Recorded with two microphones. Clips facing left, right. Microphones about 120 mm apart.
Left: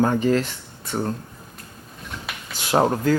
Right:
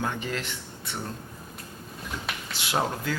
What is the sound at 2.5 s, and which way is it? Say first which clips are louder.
Speech: left 9 dB; 45° left (ahead or behind).